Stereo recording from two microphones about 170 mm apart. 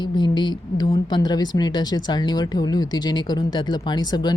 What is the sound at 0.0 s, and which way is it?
A woman's voice, 25° left (ahead or behind).